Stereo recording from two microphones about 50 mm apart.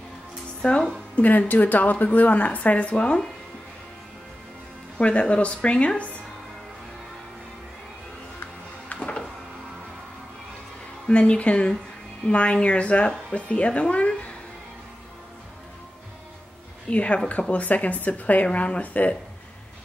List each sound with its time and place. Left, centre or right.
0.6 s speech: centre
1.1 s speech: left
4.9 s speech: left
11.1 s speech: left
16.9 s speech: left